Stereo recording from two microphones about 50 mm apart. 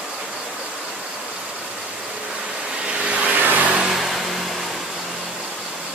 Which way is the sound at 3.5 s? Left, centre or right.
Right.